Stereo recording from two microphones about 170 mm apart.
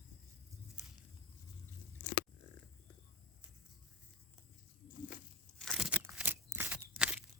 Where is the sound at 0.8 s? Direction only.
5° right (ahead or behind).